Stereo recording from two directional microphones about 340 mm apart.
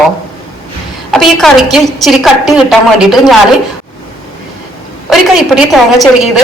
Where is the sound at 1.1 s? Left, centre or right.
Centre.